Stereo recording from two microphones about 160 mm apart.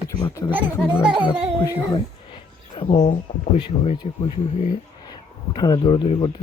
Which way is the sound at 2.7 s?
30° left (ahead or behind).